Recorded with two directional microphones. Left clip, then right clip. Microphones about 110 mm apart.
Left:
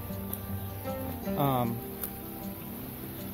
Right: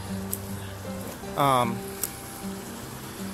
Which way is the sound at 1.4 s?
35° left (ahead or behind).